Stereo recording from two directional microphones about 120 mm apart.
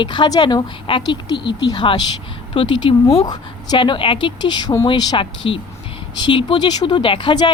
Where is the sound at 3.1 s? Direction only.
35° left (ahead or behind).